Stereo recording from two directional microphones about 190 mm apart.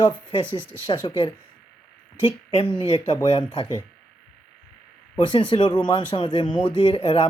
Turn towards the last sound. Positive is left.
turn(degrees=30)  # may be behind; listen again after turning